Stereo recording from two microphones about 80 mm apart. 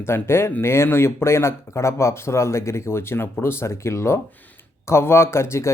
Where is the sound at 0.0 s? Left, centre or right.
Left.